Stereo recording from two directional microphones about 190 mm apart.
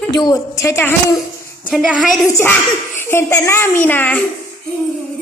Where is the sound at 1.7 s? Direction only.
Centre (ahead or behind).